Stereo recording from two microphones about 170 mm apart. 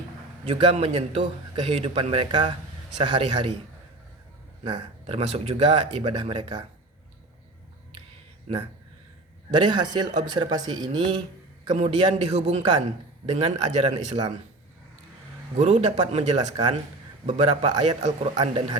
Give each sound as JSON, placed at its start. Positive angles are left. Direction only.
{"t": 0.4, "sound": "a man's voice", "side_deg": -35}
{"t": 4.6, "sound": "a man's voice", "side_deg": -30}
{"t": 9.5, "sound": "speech", "side_deg": -25}
{"t": 11.7, "sound": "a man's voice", "side_deg": -40}
{"t": 15.5, "sound": "a man's voice", "side_deg": -40}